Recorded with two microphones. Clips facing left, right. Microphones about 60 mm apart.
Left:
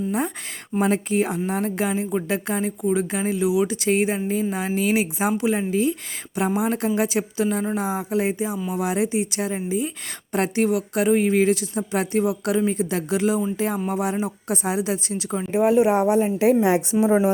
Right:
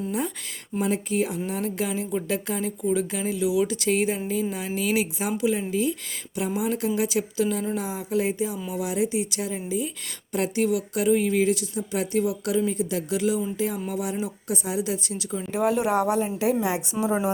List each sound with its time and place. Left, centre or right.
0.8 s a woman's voice: left
1.1 s a woman's voice: left
8.7 s a woman's voice: left
10.3 s a woman's voice: left
15.5 s speech: centre
16.2 s a woman's voice: left